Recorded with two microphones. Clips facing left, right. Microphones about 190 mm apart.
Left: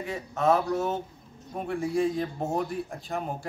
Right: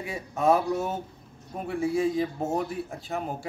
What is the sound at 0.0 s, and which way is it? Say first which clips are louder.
Speech: right 1 dB; 10° right (ahead or behind).